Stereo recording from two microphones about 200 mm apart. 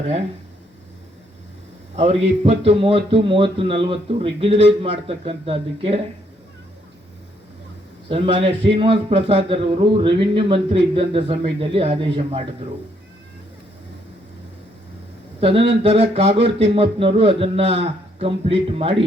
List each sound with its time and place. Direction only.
2.0 s a man's voice: 30° right (ahead or behind)
8.1 s a man's voice: 30° right (ahead or behind)
15.4 s a man's voice: 30° right (ahead or behind)